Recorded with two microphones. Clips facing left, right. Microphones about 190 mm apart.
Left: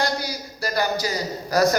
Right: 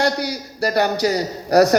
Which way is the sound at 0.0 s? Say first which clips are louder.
Right 5 dB; 65° right (ahead or behind).